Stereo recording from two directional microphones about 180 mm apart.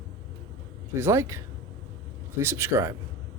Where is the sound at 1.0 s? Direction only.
15° right (ahead or behind).